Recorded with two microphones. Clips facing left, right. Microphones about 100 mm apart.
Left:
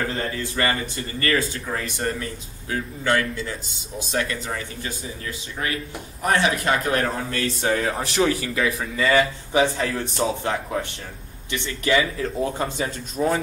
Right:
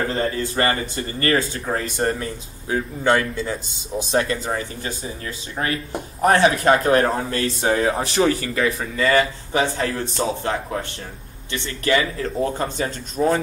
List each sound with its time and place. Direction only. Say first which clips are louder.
0.0 s speech: right 4 dB; 30° right (ahead or behind)
7.7 s speech: right 5 dB; 15° right (ahead or behind)
8.0 s speech: right 2 dB; centre (ahead or behind)